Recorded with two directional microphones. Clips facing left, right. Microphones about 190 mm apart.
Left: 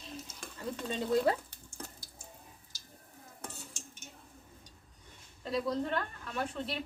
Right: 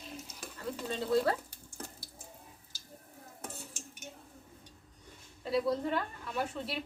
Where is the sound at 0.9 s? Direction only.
15° left (ahead or behind).